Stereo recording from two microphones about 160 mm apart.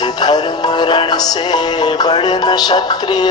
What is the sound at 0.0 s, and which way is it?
Music, 25° left (ahead or behind).